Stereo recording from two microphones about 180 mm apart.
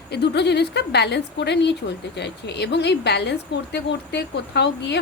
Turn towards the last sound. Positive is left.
turn(degrees=70)  # may be behind; listen again after turning